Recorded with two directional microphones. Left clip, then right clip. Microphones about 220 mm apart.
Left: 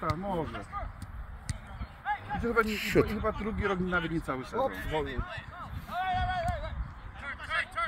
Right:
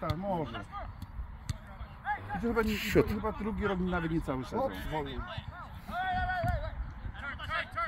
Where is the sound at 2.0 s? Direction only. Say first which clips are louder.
Left 2 dB; 5° right (ahead or behind).